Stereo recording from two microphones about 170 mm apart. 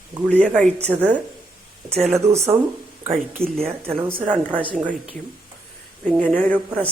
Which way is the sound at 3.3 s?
5° left (ahead or behind).